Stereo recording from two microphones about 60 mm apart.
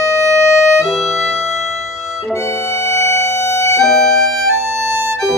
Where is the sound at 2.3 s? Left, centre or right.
Left.